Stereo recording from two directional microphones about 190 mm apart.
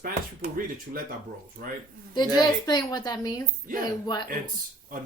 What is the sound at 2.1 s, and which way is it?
A woman's voice, 20° left (ahead or behind).